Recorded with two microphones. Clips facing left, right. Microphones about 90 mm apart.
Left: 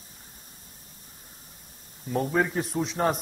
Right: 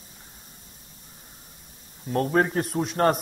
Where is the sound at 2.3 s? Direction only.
45° right (ahead or behind).